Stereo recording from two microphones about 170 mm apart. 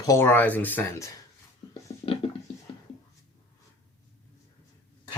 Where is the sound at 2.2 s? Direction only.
30° left (ahead or behind).